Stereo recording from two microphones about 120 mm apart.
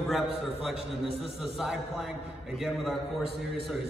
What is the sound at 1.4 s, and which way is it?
A man's voice, 5° right (ahead or behind).